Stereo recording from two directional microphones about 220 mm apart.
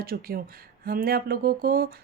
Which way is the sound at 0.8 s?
45° right (ahead or behind).